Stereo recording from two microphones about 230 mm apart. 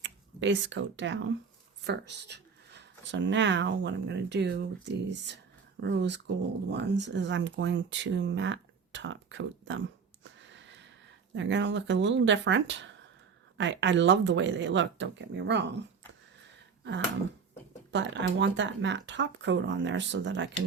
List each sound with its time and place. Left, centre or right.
0.0 s speech: right
10.5 s a sound: right
11.3 s speech: right
17.9 s speech: right